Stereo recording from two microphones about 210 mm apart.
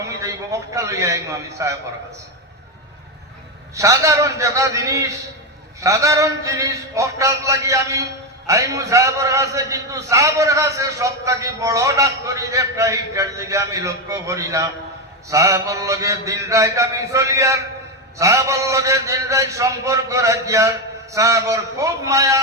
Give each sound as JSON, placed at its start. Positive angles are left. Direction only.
{"t": 0.0, "sound": "a man's voice", "side_deg": -15}
{"t": 3.8, "sound": "a man's voice", "side_deg": -15}